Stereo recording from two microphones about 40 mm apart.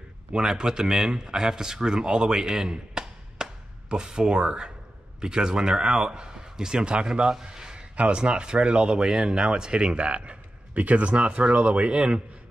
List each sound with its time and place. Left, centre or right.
0.3 s speech: centre
7.4 s a sound: right
7.9 s speech: right